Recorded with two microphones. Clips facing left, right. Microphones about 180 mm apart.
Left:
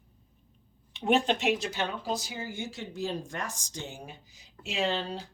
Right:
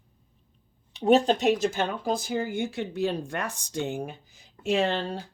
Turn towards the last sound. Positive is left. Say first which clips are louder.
# right 5 dB
turn(degrees=-50)  # may be behind; listen again after turning